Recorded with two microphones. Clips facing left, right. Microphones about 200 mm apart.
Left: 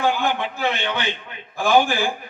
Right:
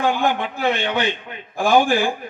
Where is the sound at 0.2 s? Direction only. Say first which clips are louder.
Right 2 dB; 50° right (ahead or behind).